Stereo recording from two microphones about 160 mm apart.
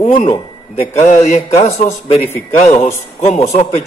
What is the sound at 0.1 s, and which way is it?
A man's voice, 45° left (ahead or behind).